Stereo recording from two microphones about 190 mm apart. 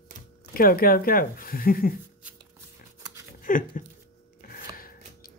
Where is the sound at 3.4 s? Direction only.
45° left (ahead or behind).